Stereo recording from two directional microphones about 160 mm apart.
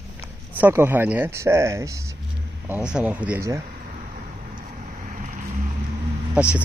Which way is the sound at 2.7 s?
10° right (ahead or behind).